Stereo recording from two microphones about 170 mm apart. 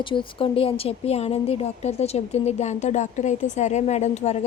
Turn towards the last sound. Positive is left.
turn(degrees=40)  # may be behind; listen again after turning